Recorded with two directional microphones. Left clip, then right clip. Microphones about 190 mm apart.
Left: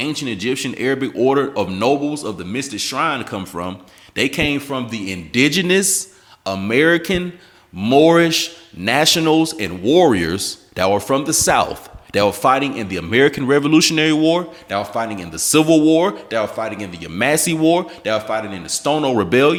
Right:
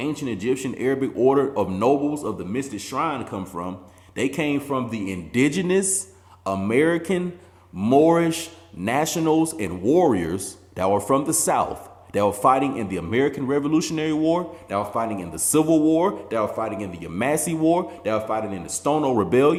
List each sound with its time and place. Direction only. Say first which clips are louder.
0.0 s a man's voice: left 4 dB; 35° left (ahead or behind)